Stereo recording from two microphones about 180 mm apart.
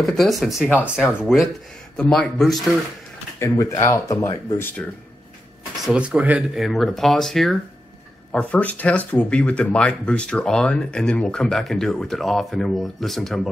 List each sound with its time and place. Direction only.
0.0 s speech: centre (ahead or behind)
3.3 s speech: 15° left (ahead or behind)
5.9 s speech: 5° right (ahead or behind)